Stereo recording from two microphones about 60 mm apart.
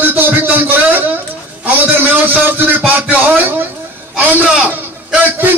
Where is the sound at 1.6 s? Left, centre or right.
Right.